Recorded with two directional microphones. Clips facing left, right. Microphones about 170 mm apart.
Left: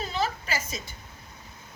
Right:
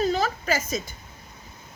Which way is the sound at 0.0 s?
45° right (ahead or behind).